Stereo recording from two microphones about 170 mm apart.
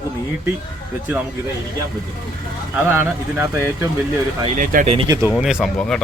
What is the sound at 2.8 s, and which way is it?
Speech, 15° right (ahead or behind).